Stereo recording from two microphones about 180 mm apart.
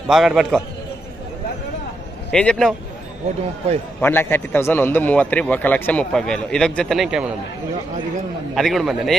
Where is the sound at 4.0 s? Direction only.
10° left (ahead or behind).